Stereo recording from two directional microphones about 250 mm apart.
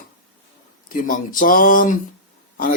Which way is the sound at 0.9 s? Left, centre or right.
Left.